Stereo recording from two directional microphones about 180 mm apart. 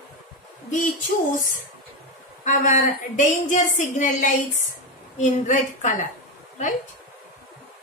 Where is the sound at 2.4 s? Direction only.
45° left (ahead or behind).